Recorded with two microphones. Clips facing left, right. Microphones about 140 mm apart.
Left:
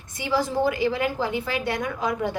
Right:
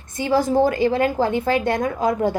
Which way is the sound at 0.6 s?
50° right (ahead or behind).